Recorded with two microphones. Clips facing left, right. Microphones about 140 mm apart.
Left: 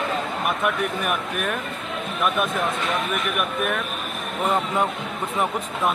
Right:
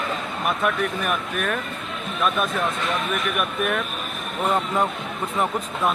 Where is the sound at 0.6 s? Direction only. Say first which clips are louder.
Right 2 dB; 10° left (ahead or behind).